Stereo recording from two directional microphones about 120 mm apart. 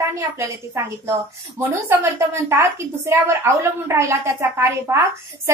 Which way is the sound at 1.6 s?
20° right (ahead or behind).